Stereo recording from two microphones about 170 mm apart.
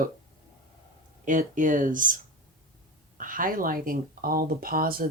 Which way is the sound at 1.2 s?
50° right (ahead or behind).